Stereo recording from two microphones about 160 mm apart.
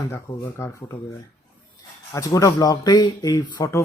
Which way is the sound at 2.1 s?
20° left (ahead or behind).